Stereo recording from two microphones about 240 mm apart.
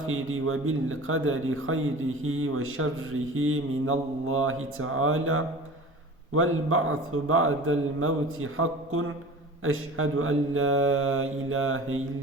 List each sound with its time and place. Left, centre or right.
0.1 s speech: right